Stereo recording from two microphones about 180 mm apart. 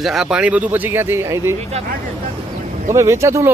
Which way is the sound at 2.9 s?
15° right (ahead or behind).